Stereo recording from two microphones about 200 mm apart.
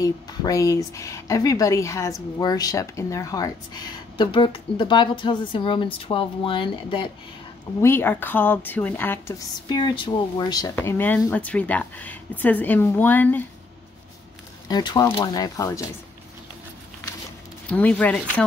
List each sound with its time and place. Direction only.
0.0 s a woman's voice: 15° left (ahead or behind)
7.8 s speech: 10° left (ahead or behind)
14.7 s speech: 20° left (ahead or behind)
17.6 s speech: 5° left (ahead or behind)